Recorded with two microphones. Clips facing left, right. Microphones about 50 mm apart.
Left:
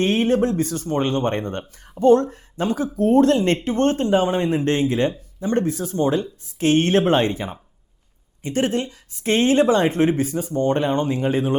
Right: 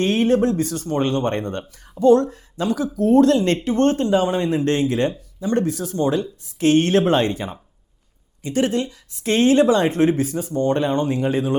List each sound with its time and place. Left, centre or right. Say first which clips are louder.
0.0 s speech: right 1 dB; left